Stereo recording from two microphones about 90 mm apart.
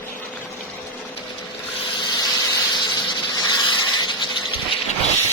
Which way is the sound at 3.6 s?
60° left (ahead or behind).